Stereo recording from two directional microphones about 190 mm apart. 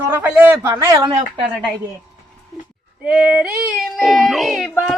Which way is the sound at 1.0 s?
25° right (ahead or behind).